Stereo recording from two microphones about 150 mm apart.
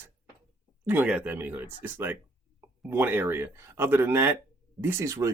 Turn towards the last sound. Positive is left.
turn(degrees=-20)  # may be behind; listen again after turning